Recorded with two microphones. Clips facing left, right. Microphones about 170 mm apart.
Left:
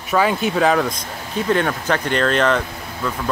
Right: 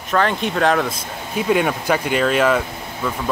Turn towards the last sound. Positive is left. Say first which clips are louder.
# right 1 dB
turn(degrees=-5)  # may be behind; listen again after turning